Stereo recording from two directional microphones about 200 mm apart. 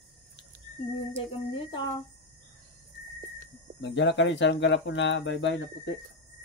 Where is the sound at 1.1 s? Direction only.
25° left (ahead or behind).